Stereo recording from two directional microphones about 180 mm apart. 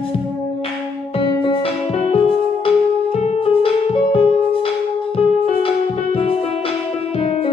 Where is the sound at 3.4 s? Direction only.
30° left (ahead or behind).